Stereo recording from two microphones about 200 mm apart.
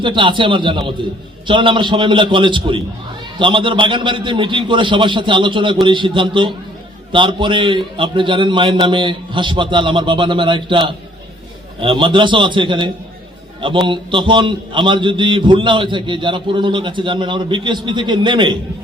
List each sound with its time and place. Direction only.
0.0 s a man's voice: 25° right (ahead or behind)